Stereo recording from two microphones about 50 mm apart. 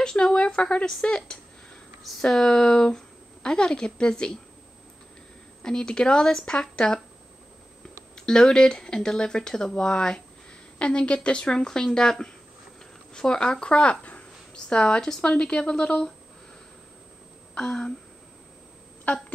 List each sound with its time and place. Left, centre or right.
0.0 s speech: centre
5.6 s a woman's voice: centre
8.3 s a woman's voice: centre
15.0 s a woman's voice: centre
17.6 s speech: centre
19.1 s speech: left